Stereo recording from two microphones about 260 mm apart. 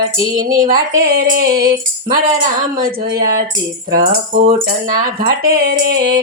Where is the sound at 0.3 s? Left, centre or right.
Right.